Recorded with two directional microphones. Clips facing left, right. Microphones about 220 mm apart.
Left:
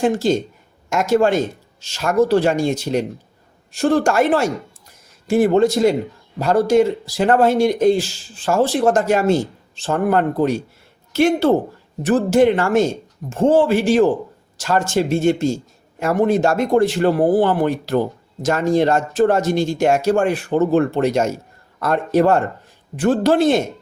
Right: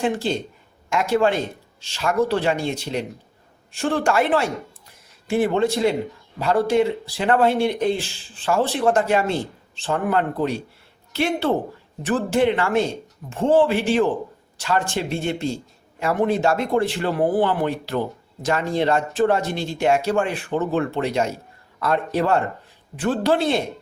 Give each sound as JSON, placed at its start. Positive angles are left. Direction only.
{"t": 0.0, "sound": "speech", "side_deg": 40}